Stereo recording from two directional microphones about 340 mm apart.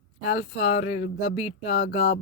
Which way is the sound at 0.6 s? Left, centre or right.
Centre.